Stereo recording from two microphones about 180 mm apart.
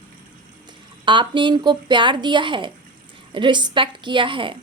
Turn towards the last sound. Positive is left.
turn(degrees=-30)  # may be behind; listen again after turning